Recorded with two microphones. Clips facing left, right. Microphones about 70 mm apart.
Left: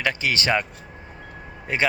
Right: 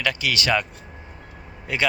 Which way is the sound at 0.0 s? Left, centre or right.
Left.